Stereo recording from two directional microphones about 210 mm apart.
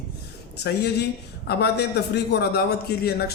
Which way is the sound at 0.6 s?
50° left (ahead or behind).